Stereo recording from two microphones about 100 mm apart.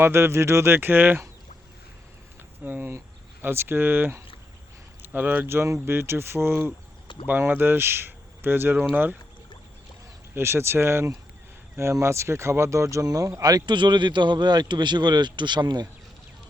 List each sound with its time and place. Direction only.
0.0 s speech: 25° right (ahead or behind)
2.6 s speech: 20° right (ahead or behind)
10.3 s a man's voice: 25° right (ahead or behind); by 15.9 s 45° right (ahead or behind)